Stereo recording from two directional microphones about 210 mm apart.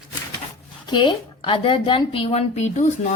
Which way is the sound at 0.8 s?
20° left (ahead or behind).